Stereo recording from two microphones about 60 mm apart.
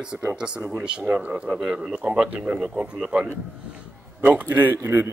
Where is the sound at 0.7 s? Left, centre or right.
Centre.